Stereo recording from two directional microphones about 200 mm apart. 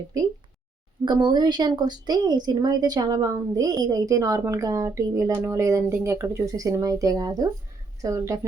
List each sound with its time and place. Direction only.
1.0 s a woman's voice: 20° right (ahead or behind)